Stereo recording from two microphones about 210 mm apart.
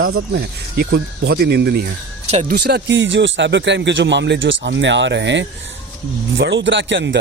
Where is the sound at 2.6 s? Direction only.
55° right (ahead or behind).